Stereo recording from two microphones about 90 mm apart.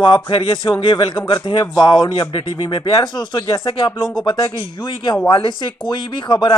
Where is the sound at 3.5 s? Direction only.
85° left; by 5.2 s 55° left (ahead or behind).